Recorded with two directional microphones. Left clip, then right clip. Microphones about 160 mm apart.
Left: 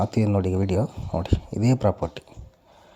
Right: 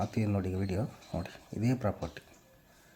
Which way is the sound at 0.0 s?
35° left (ahead or behind).